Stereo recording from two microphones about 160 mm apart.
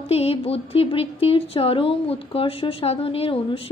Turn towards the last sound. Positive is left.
turn(degrees=35)  # may be behind; listen again after turning